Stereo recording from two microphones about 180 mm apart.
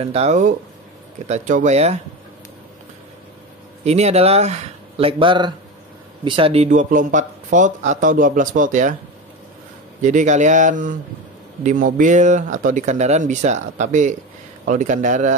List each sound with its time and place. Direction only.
0.0 s speech: 35° right (ahead or behind)
3.8 s speech: 35° right (ahead or behind)
10.0 s speech: 45° right (ahead or behind)